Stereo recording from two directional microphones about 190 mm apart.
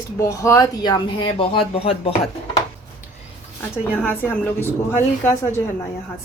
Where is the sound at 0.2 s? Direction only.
15° left (ahead or behind).